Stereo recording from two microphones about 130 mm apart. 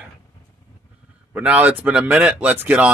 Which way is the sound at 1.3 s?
10° right (ahead or behind).